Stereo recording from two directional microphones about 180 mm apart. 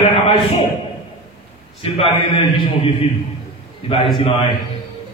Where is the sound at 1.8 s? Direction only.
30° left (ahead or behind).